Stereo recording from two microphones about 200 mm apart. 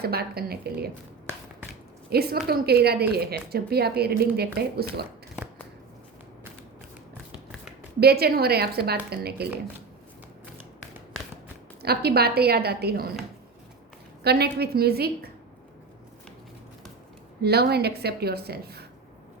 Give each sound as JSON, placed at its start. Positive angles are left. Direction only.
{"t": 0.0, "sound": "a woman's voice", "side_deg": -50}
{"t": 2.0, "sound": "a woman's voice", "side_deg": -50}
{"t": 7.9, "sound": "a woman's voice", "side_deg": -50}
{"t": 11.8, "sound": "a woman's voice", "side_deg": -50}
{"t": 14.3, "sound": "a woman's voice", "side_deg": -55}
{"t": 17.4, "sound": "a woman's voice", "side_deg": -55}